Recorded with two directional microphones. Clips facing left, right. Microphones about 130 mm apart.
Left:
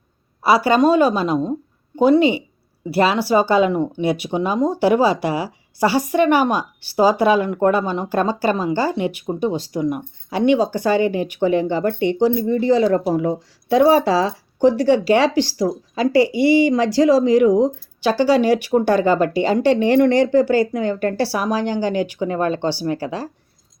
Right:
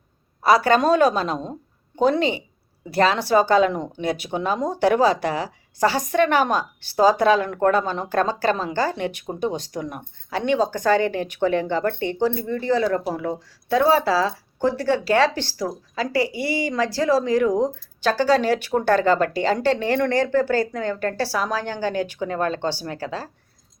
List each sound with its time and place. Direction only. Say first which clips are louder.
0.4 s a woman's voice: left 2 dB; 5° left (ahead or behind)